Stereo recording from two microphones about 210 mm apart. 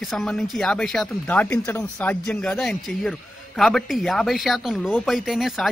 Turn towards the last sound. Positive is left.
turn(degrees=0)  # may be behind; listen again after turning